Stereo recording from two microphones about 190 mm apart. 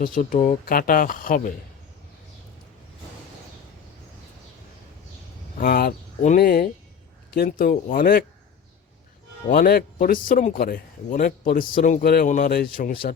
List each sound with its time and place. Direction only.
0.0 s a man's voice: 45° left (ahead or behind)
5.5 s a man's voice: 50° left (ahead or behind)
9.5 s a man's voice: 50° left (ahead or behind)